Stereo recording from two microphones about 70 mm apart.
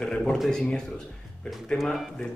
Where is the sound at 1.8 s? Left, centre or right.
Centre.